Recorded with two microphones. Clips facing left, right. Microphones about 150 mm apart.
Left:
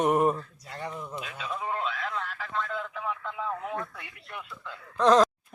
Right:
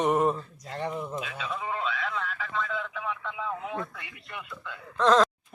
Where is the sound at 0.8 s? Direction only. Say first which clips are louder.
Right 5 dB; 15° right (ahead or behind).